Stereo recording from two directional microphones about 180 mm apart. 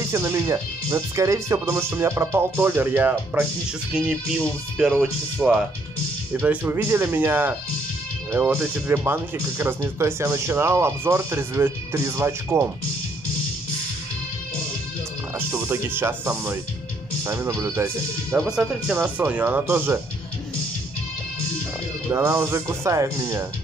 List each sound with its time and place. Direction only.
0.1 s speech: 15° right (ahead or behind)
15.3 s speech: 15° right (ahead or behind)
22.1 s speech: 15° right (ahead or behind)